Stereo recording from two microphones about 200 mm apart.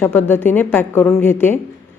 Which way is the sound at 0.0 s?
10° left (ahead or behind).